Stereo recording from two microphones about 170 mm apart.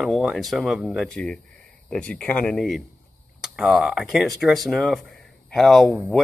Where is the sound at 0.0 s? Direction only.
Centre (ahead or behind).